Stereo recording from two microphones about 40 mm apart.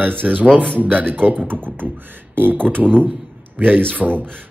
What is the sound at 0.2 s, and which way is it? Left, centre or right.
Speech, right.